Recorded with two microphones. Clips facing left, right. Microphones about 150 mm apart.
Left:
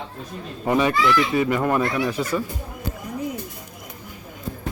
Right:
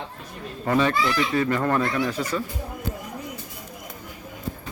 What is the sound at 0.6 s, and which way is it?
Speech, 15° left (ahead or behind).